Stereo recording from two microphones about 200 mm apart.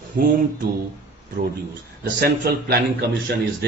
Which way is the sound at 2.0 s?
55° right (ahead or behind).